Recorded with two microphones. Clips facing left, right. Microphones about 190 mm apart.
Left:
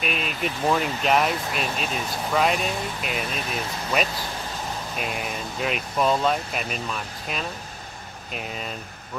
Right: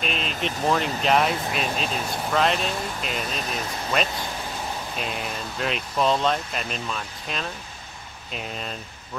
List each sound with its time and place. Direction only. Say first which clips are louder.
0.0 s speech: even; 5° left (ahead or behind)